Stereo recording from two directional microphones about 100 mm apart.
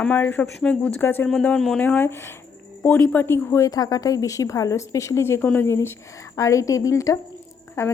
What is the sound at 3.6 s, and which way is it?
A woman's voice, 40° left (ahead or behind).